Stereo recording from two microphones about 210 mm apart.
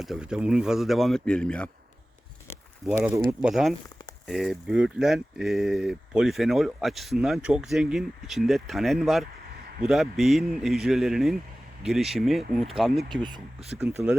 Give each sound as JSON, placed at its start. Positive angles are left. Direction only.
{"t": 0.0, "sound": "speech", "side_deg": 0}
{"t": 2.8, "sound": "speech", "side_deg": -5}
{"t": 13.2, "sound": "speech", "side_deg": -20}
{"t": 13.7, "sound": "speech", "side_deg": -5}